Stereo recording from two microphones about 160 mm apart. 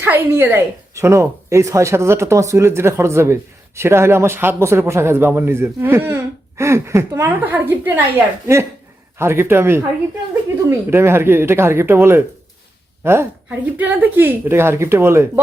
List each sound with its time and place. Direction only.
0.0 s speech: 10° right (ahead or behind)